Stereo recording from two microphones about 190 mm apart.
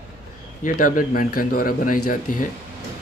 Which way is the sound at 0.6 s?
45° left (ahead or behind).